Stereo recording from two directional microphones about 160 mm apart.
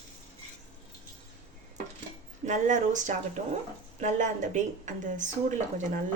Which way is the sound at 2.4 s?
50° right (ahead or behind).